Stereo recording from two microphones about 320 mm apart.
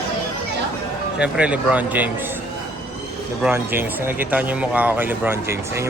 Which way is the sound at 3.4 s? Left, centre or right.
Centre.